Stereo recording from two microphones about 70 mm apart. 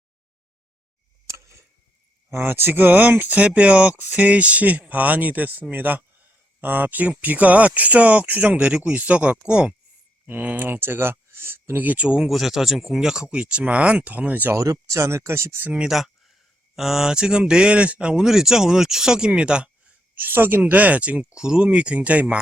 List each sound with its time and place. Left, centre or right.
1.3 s scissors: right
2.3 s speech: right; by 9.7 s centre
10.2 s speech: right
12.3 s speech: centre; by 14.5 s right
14.5 s speech: right
15.7 s speech: centre
20.1 s speech: right